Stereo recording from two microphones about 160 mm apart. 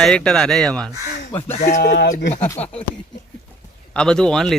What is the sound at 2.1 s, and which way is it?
Speech, 75° left (ahead or behind).